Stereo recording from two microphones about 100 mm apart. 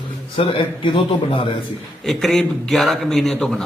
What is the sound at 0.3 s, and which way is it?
Speech, 60° left (ahead or behind).